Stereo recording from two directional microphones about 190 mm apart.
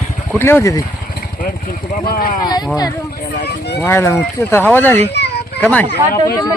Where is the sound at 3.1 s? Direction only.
60° left (ahead or behind).